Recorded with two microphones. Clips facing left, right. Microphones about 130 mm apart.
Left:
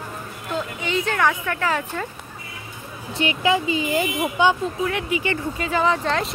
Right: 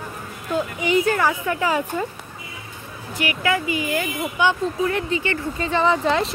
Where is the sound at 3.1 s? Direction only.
25° left (ahead or behind).